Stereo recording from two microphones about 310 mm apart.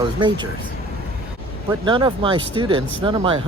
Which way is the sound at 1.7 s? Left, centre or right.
Centre.